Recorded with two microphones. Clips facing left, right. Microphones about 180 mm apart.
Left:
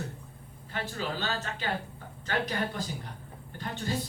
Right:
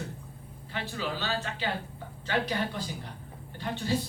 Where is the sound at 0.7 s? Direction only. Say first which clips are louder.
Even; 45° left (ahead or behind).